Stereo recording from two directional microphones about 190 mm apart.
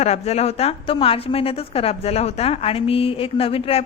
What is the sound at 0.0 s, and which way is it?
A woman's voice, 35° left (ahead or behind).